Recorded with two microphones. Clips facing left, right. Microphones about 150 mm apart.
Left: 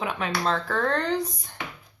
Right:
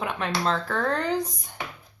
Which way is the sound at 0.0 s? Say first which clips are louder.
Even; centre (ahead or behind).